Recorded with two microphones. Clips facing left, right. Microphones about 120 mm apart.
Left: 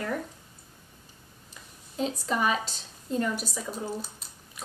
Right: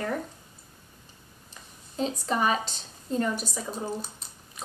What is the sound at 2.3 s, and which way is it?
Speech, 40° right (ahead or behind).